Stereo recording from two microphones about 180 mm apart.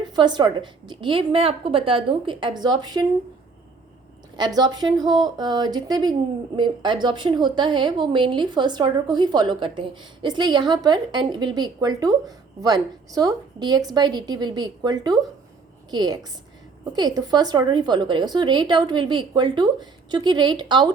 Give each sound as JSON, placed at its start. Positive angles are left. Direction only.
{"t": 0.0, "sound": "a woman's voice", "side_deg": -25}
{"t": 4.4, "sound": "a woman's voice", "side_deg": -25}